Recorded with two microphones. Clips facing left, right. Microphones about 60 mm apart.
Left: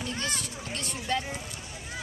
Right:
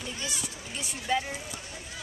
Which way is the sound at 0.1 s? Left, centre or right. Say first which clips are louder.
Left 4 dB; left.